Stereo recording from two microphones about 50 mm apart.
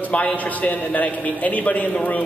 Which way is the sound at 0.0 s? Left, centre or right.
Left.